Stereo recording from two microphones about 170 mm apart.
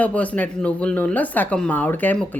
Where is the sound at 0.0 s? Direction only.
10° left (ahead or behind).